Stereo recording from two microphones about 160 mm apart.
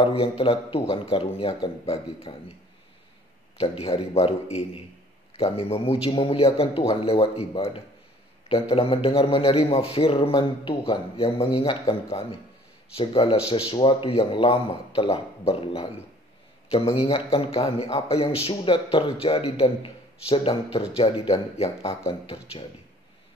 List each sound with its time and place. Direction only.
0.0 s a man's voice: 35° left (ahead or behind)
3.5 s a man's voice: 40° left (ahead or behind)
17.0 s a man's voice: 35° left (ahead or behind)